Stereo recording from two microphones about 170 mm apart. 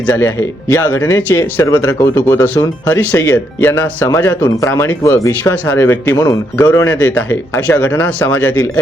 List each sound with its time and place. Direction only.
0.0 s speech: 15° left (ahead or behind)